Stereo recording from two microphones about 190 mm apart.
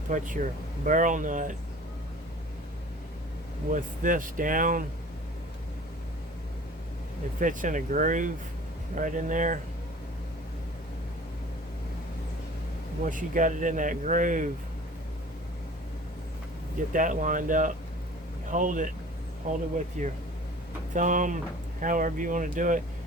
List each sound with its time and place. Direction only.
0.1 s speech: 45° right (ahead or behind)
3.7 s speech: 45° right (ahead or behind)
7.3 s speech: 45° right (ahead or behind)
13.1 s speech: 45° right (ahead or behind)
16.9 s speech: 45° right (ahead or behind)